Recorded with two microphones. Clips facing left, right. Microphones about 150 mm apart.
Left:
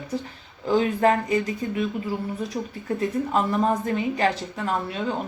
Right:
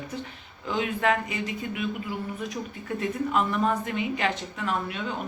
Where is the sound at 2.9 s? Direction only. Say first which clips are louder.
Left 3 dB; 35° left (ahead or behind).